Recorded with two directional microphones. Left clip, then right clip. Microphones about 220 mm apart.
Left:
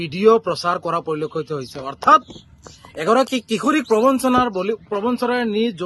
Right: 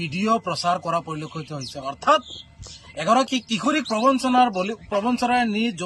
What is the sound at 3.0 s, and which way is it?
A man's voice, 15° left (ahead or behind).